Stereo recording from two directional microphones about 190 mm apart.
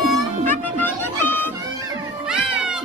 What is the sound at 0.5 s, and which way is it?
Music, 10° left (ahead or behind).